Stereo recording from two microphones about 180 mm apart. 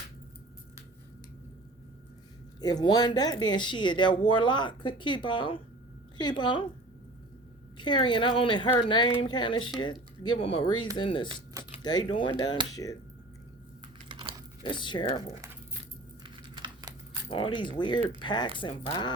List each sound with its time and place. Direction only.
2.6 s speech: 20° left (ahead or behind)
7.8 s speech: 25° left (ahead or behind)
14.1 s typing: 25° right (ahead or behind)
14.6 s speech: 25° left (ahead or behind)
16.2 s keys jangling: 25° right (ahead or behind)
17.2 s speech: 30° left (ahead or behind)